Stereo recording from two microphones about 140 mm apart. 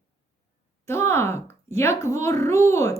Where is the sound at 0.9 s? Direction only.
20° left (ahead or behind).